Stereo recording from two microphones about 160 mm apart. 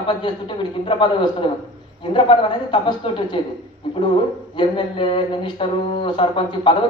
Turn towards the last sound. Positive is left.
turn(degrees=30)  # may be behind; listen again after turning